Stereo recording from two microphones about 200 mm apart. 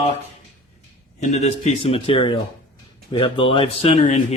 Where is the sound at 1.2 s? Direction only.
35° left (ahead or behind).